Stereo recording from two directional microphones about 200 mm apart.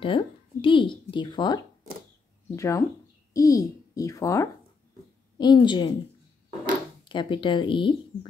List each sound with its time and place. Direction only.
0.0 s a child's voice: 25° left (ahead or behind)
7.1 s speech: 25° left (ahead or behind)